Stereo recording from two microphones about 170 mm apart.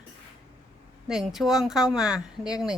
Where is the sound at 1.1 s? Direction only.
Centre (ahead or behind).